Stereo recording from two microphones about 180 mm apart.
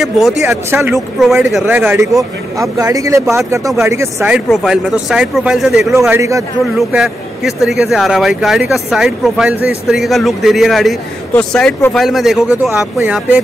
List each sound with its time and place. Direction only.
0.0 s speech: centre (ahead or behind)
0.4 s speech: 15° right (ahead or behind)
0.7 s speech: centre (ahead or behind)
4.5 s speech: centre (ahead or behind)
5.9 s speech: 15° right (ahead or behind)
6.9 s speech: 5° right (ahead or behind)